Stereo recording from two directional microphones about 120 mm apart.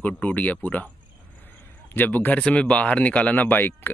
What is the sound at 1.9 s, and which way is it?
Speech, 15° left (ahead or behind).